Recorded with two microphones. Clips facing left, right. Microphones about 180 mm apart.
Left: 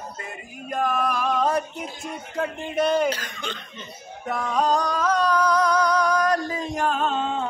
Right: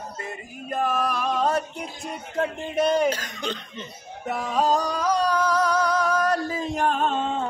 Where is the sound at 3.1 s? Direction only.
45° right (ahead or behind).